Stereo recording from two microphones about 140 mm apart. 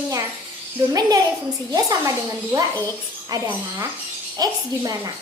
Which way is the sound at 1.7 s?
25° right (ahead or behind).